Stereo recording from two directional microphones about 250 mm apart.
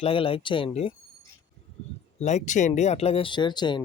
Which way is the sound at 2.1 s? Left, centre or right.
Left.